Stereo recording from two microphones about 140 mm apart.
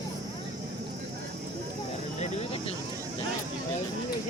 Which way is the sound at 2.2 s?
45° left (ahead or behind).